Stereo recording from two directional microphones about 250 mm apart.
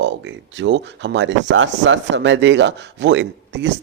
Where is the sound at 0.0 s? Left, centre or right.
Right.